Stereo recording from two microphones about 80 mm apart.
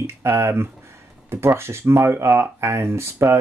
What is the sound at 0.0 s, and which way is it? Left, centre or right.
Speech, right.